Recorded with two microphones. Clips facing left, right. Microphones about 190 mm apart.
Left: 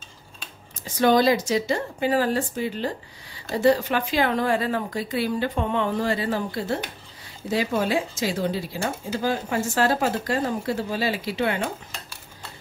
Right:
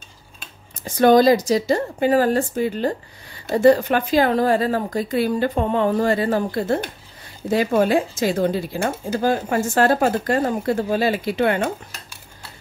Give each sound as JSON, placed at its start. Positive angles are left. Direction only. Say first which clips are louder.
{"t": 0.8, "sound": "speech", "louder": "right 5 dB", "side_deg": -50}